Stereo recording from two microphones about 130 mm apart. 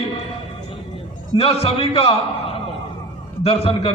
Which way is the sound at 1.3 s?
45° left (ahead or behind).